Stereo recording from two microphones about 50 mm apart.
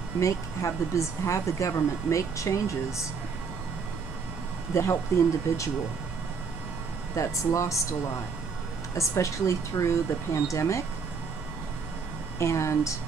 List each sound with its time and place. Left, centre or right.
0.2 s speech: left
4.7 s speech: left
7.2 s speech: left
8.9 s speech: left
12.4 s speech: left